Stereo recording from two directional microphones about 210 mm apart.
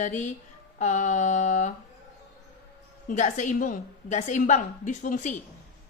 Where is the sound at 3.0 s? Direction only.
35° left (ahead or behind).